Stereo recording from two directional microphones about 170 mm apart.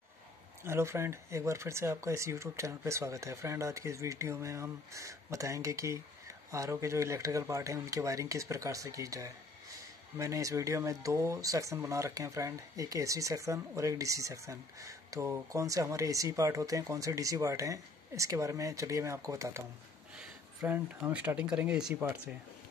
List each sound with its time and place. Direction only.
0.7 s speech: 15° right (ahead or behind)